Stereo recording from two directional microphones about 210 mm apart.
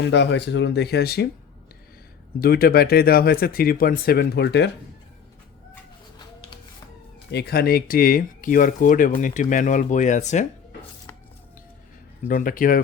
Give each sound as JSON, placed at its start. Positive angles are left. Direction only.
{"t": 0.1, "sound": "speech", "side_deg": 55}
{"t": 2.4, "sound": "speech", "side_deg": 45}
{"t": 7.3, "sound": "speech", "side_deg": 50}
{"t": 12.3, "sound": "speech", "side_deg": 40}